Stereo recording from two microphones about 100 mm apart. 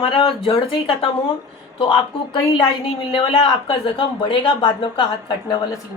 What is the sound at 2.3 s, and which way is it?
A woman's voice, 55° left (ahead or behind).